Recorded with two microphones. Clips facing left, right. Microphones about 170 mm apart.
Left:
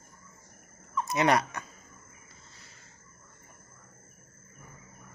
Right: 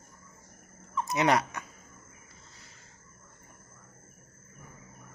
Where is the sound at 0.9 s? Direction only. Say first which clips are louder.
Even; 20° right (ahead or behind).